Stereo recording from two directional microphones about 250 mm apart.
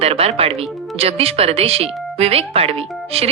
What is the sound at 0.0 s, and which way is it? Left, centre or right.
Speech, right.